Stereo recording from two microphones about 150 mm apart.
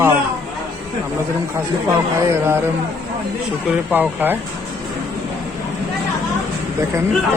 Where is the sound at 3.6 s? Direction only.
10° right (ahead or behind).